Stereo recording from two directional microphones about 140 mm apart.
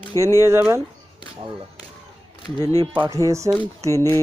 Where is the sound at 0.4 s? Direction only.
20° right (ahead or behind).